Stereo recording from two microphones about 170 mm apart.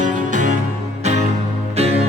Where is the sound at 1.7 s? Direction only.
40° right (ahead or behind).